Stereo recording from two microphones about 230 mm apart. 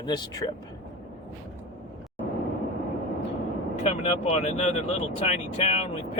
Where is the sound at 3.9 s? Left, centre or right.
Left.